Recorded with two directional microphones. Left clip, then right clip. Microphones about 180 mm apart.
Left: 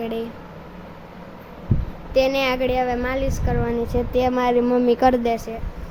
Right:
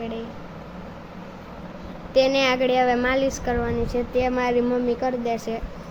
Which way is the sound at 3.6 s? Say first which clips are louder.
Left 2 dB; 10° left (ahead or behind).